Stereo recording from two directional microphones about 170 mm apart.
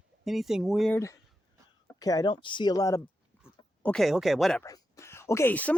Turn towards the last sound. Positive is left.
turn(degrees=10)  # may be behind; listen again after turning